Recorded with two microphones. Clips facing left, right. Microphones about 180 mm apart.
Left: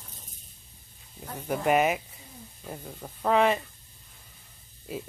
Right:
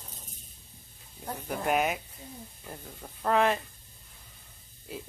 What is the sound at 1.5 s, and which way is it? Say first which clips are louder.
Speech: left 4 dB; centre (ahead or behind).